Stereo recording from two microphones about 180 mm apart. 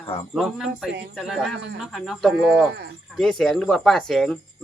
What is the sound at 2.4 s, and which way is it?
Speech, 65° right (ahead or behind).